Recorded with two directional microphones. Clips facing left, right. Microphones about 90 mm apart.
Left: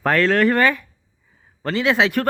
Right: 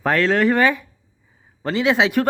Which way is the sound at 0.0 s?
5° right (ahead or behind).